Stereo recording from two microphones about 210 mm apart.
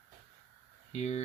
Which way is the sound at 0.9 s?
30° left (ahead or behind).